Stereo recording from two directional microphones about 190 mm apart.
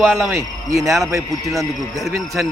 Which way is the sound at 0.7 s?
15° right (ahead or behind).